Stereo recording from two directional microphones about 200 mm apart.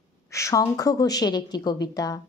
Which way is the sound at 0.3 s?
15° left (ahead or behind).